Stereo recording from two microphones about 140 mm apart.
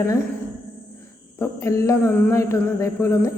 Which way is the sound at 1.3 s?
20° left (ahead or behind).